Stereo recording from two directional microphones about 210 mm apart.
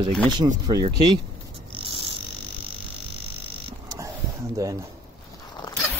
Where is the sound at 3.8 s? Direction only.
15° right (ahead or behind).